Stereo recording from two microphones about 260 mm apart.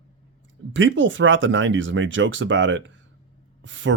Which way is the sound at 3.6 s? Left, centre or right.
Right.